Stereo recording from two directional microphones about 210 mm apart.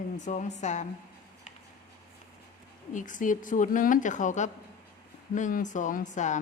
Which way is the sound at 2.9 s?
35° left (ahead or behind).